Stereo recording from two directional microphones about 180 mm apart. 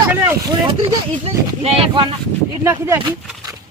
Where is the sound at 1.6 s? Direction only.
30° right (ahead or behind).